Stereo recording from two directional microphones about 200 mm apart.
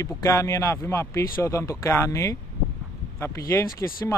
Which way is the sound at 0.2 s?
15° left (ahead or behind).